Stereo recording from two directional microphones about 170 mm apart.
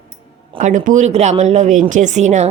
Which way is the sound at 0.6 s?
50° right (ahead or behind).